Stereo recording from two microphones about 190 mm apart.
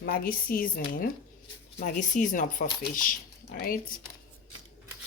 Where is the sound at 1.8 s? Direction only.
40° left (ahead or behind).